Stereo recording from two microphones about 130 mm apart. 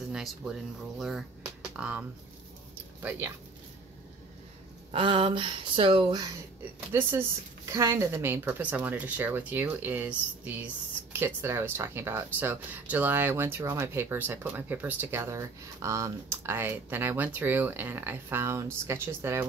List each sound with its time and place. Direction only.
0.1 s speech: centre (ahead or behind)
4.9 s speech: 40° right (ahead or behind)
6.9 s speech: 20° right (ahead or behind)